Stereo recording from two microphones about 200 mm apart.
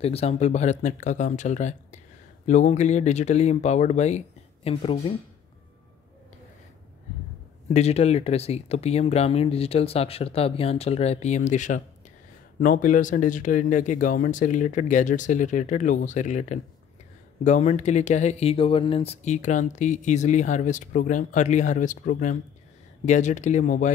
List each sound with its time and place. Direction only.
0.0 s speech: 30° left (ahead or behind)
7.7 s speech: 35° left (ahead or behind)